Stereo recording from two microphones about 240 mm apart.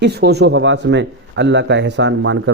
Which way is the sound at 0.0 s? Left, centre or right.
Right.